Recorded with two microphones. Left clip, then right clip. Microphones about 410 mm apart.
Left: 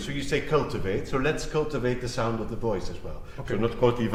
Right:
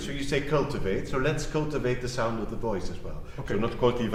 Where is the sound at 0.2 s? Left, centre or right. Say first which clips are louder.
Left 2 dB; left.